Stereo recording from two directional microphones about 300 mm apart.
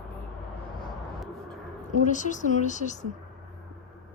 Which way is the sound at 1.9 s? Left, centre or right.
Left.